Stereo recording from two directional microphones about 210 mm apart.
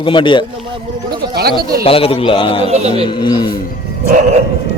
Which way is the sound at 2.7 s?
30° right (ahead or behind).